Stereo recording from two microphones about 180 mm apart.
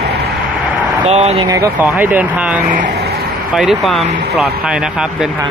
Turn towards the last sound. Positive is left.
turn(degrees=0)  # may be behind; listen again after turning